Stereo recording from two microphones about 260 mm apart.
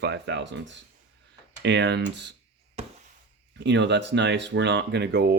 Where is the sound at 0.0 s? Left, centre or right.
Right.